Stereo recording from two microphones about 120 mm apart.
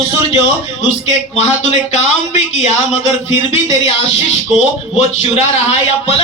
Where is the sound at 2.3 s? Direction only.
70° left (ahead or behind).